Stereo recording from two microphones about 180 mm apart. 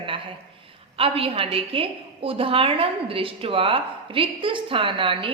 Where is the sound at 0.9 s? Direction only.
30° right (ahead or behind).